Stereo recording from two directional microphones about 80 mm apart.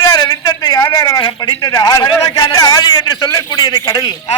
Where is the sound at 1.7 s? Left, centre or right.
Left.